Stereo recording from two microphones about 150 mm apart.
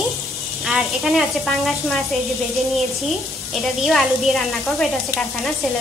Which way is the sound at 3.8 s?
Centre (ahead or behind).